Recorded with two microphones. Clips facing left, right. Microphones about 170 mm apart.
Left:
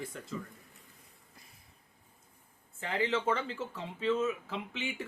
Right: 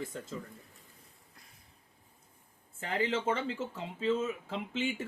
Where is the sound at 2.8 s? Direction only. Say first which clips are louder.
Even; 30° right (ahead or behind).